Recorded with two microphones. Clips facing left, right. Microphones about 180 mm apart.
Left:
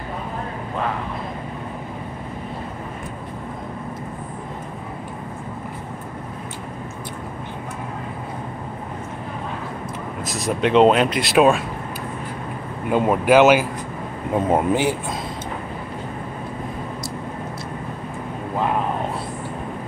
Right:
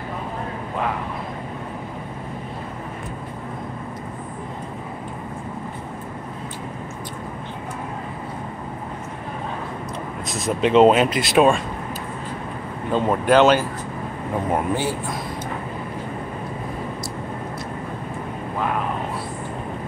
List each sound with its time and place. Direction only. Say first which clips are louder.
10.2 s speech: even; centre (ahead or behind)
12.9 s speech: left 2 dB; 10° left (ahead or behind)
14.5 s speech: left 4 dB; 20° left (ahead or behind)